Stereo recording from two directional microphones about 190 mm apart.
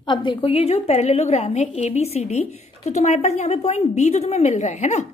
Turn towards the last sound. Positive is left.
turn(degrees=35)  # may be behind; listen again after turning